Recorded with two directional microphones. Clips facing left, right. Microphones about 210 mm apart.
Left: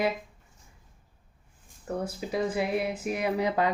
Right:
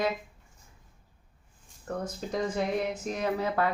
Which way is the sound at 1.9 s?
10° left (ahead or behind).